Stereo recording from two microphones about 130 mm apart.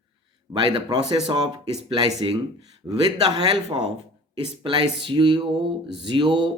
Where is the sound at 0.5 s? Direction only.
35° right (ahead or behind).